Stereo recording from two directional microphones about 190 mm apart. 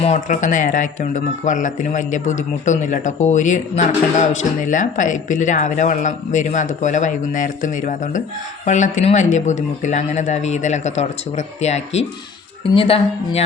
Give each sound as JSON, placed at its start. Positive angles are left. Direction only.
{"t": 0.0, "sound": "a woman's voice", "side_deg": 40}